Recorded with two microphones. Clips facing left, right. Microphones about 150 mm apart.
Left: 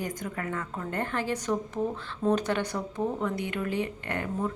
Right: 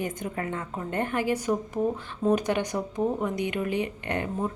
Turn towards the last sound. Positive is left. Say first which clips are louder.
# right 2 dB
turn(degrees=-20)  # may be behind; listen again after turning